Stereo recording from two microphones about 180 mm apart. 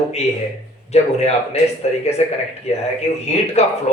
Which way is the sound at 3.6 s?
35° left (ahead or behind).